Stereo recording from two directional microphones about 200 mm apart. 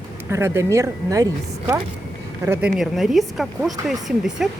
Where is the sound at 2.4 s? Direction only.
5° right (ahead or behind).